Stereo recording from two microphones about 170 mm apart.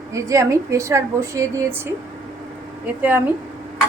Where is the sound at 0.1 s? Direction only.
20° right (ahead or behind).